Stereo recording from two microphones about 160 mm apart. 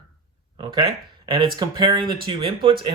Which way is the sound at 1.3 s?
30° right (ahead or behind).